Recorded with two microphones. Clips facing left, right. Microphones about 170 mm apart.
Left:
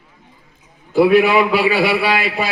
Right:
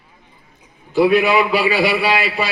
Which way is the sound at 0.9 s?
55° left (ahead or behind).